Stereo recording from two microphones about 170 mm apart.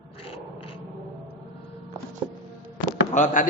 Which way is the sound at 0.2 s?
35° left (ahead or behind).